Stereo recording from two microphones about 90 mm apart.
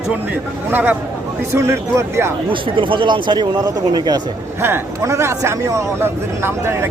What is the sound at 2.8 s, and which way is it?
Speech, 70° right (ahead or behind).